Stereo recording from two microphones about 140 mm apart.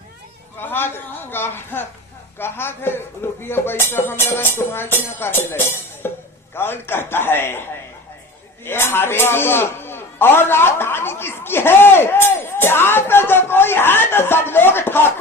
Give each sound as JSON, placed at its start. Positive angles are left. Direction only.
{"t": 0.6, "sound": "a man's voice", "side_deg": 15}
{"t": 8.6, "sound": "a man's voice", "side_deg": 15}